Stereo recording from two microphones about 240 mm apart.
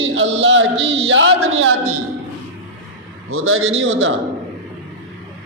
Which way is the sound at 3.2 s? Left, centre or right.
Right.